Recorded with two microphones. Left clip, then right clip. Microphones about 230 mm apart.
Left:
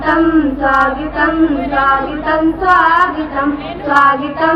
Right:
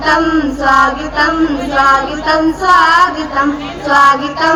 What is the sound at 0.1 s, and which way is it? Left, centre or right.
Female singing, right.